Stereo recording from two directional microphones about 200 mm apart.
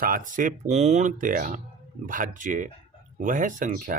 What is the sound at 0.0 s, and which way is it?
Speech, 45° right (ahead or behind).